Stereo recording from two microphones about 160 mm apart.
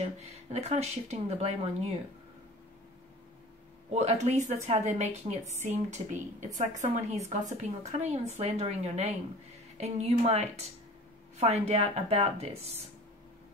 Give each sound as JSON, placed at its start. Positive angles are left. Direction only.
{"t": 0.2, "sound": "speech", "side_deg": -40}
{"t": 3.9, "sound": "speech", "side_deg": -45}